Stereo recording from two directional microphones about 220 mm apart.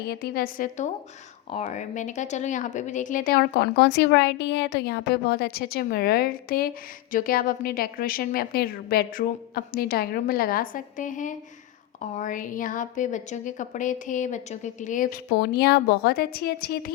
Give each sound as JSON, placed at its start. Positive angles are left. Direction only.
{"t": 0.1, "sound": "a woman's voice", "side_deg": 45}